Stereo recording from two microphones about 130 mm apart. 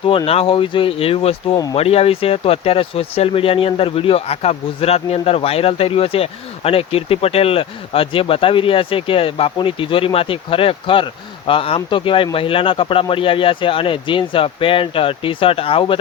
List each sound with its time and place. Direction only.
0.3 s speech: 45° left (ahead or behind)